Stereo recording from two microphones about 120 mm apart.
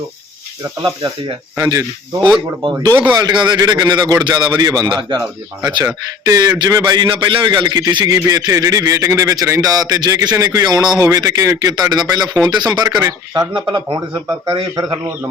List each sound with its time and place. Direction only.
0.8 s speech: 25° right (ahead or behind)
3.2 s a man's voice: 35° right (ahead or behind)